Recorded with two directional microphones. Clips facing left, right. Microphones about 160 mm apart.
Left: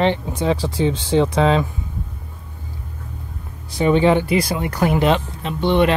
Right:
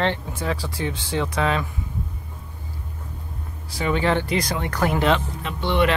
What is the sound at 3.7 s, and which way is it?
Speech, 20° left (ahead or behind).